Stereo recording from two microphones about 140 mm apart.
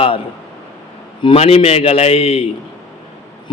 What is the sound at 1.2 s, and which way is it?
A man's voice, 45° left (ahead or behind).